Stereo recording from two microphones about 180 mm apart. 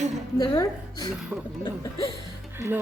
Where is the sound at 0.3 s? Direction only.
20° left (ahead or behind).